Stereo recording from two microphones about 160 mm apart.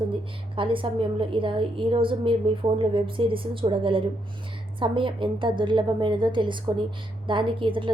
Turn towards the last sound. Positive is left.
turn(degrees=-30)  # may be behind; listen again after turning